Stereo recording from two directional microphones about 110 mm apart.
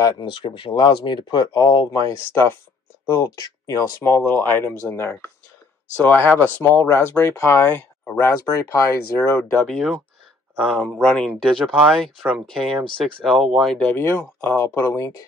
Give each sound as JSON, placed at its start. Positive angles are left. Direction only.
{"t": 0.2, "sound": "speech", "side_deg": 45}
{"t": 8.5, "sound": "speech", "side_deg": 25}
{"t": 9.6, "sound": "speech", "side_deg": 5}
{"t": 13.9, "sound": "speech", "side_deg": 20}